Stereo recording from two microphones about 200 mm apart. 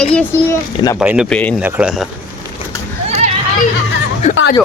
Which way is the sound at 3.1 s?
30° right (ahead or behind).